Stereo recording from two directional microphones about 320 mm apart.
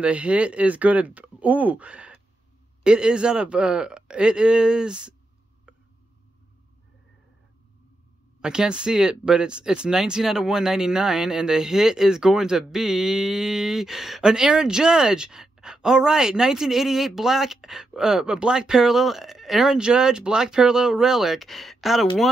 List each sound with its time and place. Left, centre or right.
0.0 s speech: centre
8.4 s speech: centre